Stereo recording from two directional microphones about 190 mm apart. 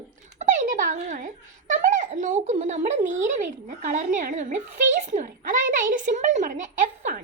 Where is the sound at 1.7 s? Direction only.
40° right (ahead or behind).